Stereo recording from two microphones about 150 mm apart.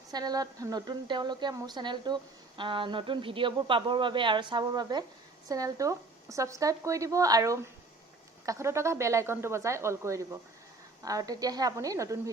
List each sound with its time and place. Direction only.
0.1 s a woman's voice: 25° right (ahead or behind)